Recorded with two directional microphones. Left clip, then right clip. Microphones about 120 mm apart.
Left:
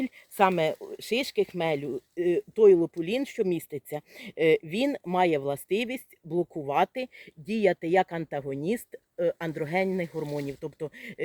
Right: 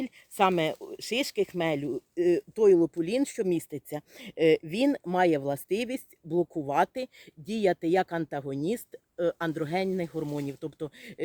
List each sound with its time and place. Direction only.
0.0 s speech: 25° right (ahead or behind)